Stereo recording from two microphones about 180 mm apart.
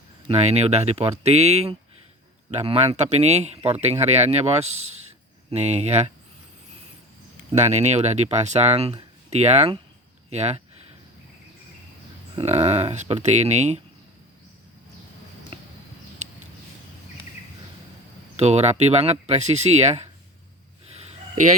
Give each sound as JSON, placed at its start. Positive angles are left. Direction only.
{"t": 0.3, "sound": "speech", "side_deg": -35}
{"t": 7.5, "sound": "speech", "side_deg": -40}
{"t": 12.4, "sound": "speech", "side_deg": -35}
{"t": 18.3, "sound": "speech", "side_deg": -35}